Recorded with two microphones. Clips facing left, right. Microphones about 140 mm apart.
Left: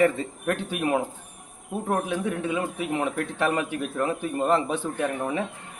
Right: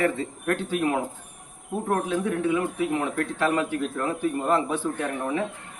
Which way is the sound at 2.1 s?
20° left (ahead or behind).